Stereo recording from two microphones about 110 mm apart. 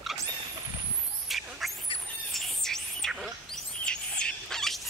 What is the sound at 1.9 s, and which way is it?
Squawk, 60° left (ahead or behind).